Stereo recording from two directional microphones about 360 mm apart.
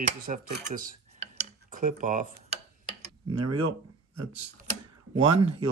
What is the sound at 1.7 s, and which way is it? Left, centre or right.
Tick-tock, right.